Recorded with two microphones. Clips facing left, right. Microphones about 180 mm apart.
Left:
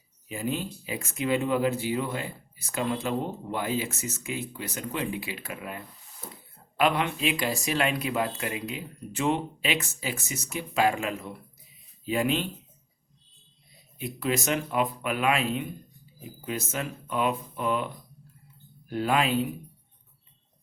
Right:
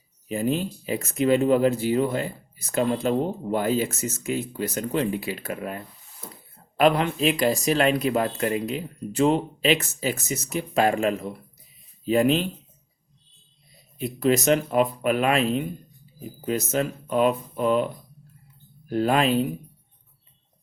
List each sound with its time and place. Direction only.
0.3 s speech: 45° right (ahead or behind)
14.0 s speech: 45° right (ahead or behind)
18.9 s speech: 45° right (ahead or behind)